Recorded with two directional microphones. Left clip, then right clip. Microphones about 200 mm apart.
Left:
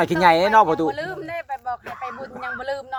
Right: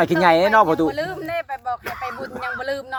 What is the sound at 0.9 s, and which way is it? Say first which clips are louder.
Speech: right 3 dB; 20° right (ahead or behind).